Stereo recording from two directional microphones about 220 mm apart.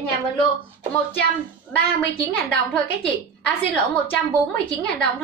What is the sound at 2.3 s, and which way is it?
A woman's voice, 5° left (ahead or behind).